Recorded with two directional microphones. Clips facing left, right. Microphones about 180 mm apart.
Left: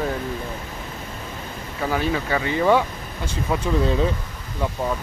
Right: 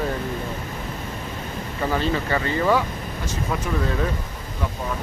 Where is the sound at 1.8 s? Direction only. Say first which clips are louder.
Even; 5° left (ahead or behind).